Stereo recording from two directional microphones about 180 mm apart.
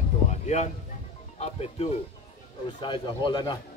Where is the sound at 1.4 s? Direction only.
35° left (ahead or behind).